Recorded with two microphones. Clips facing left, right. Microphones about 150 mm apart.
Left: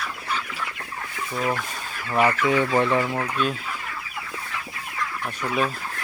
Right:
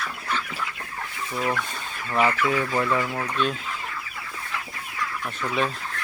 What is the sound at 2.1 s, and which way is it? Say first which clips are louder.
Speech: left 2 dB; 15° left (ahead or behind).